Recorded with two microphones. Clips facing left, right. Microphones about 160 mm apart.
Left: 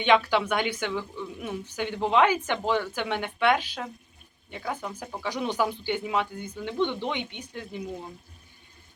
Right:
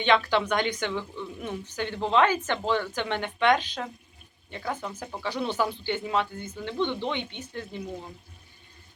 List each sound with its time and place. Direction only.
0.0 s speech: 10° left (ahead or behind)